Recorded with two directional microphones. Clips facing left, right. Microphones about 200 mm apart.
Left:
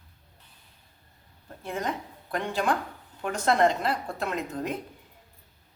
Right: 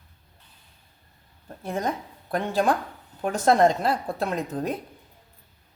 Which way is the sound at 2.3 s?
35° right (ahead or behind).